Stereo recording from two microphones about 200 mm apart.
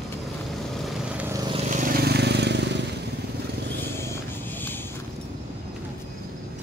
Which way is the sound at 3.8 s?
10° left (ahead or behind).